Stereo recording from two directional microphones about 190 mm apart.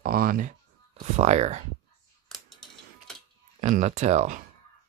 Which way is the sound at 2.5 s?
Centre (ahead or behind).